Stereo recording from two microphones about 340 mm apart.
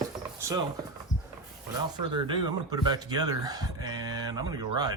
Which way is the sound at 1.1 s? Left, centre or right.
Left.